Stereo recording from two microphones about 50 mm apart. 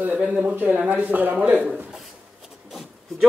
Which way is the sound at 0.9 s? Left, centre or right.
Right.